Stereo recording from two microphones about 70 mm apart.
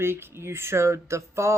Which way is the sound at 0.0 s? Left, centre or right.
Right.